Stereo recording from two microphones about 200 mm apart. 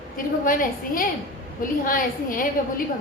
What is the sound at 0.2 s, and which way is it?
Speech, 45° left (ahead or behind).